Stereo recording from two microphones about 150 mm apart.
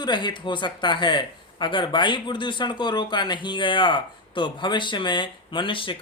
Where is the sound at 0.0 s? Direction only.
30° left (ahead or behind).